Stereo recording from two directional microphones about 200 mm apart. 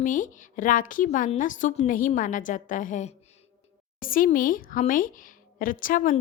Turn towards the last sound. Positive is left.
turn(degrees=45)  # may be behind; listen again after turning